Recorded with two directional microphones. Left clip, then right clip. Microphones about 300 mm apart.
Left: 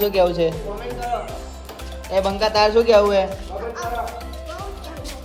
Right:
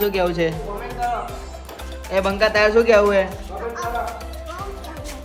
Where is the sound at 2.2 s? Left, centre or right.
Centre.